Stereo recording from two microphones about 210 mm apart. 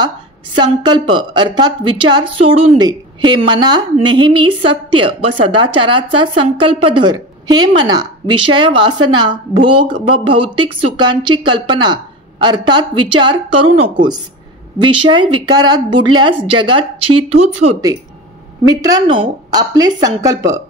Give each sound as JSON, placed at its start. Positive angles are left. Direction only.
{"t": 0.6, "sound": "a woman's voice", "side_deg": -20}
{"t": 18.7, "sound": "a woman's voice", "side_deg": -20}